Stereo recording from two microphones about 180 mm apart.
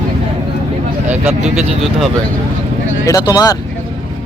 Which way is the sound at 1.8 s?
Centre (ahead or behind).